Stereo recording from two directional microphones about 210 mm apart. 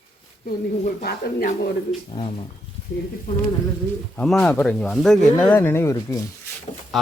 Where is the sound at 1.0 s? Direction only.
50° left (ahead or behind).